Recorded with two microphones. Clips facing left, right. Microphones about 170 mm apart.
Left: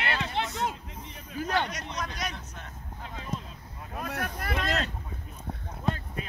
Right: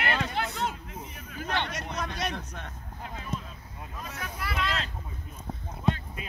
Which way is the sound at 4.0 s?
60° left (ahead or behind).